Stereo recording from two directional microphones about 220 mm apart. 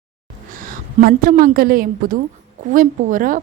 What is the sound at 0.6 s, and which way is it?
A woman's voice, 40° right (ahead or behind).